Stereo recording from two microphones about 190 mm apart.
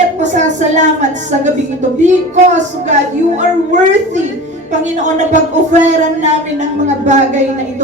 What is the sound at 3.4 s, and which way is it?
Speech, 40° right (ahead or behind).